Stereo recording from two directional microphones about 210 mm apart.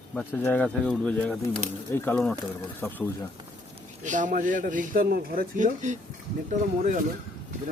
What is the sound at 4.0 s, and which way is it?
Speech, 35° right (ahead or behind).